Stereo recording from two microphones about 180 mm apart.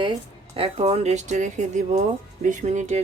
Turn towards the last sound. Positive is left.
turn(degrees=-40)  # may be behind; listen again after turning